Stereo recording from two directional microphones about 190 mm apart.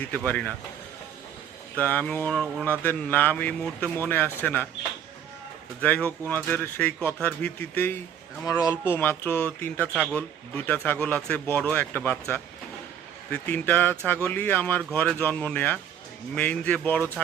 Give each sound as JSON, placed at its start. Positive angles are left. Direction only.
{"t": 0.3, "sound": "speech", "side_deg": 10}
{"t": 1.8, "sound": "speech", "side_deg": 10}
{"t": 5.8, "sound": "speech", "side_deg": 10}
{"t": 13.3, "sound": "speech", "side_deg": 10}